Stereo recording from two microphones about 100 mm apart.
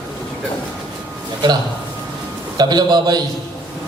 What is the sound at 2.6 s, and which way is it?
Speech, 45° right (ahead or behind).